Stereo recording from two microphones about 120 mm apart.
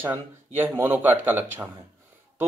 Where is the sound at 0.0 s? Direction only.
15° right (ahead or behind).